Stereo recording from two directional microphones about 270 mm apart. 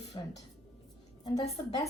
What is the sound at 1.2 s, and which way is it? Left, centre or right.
Speech, centre.